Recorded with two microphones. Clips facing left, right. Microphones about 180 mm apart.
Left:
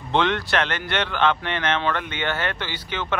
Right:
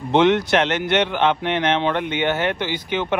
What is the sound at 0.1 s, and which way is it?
Speech, 15° right (ahead or behind).